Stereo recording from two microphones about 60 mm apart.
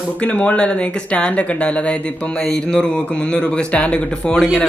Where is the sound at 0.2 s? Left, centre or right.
Left.